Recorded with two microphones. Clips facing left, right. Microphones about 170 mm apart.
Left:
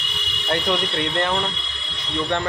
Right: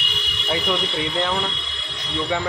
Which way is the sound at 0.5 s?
Centre (ahead or behind).